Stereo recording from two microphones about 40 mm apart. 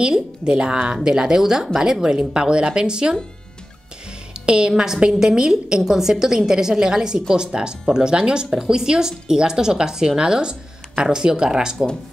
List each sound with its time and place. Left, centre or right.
0.0 s a woman's voice: right
4.5 s a woman's voice: right